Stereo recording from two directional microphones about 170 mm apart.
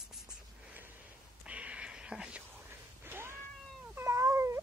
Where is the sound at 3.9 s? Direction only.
20° right (ahead or behind).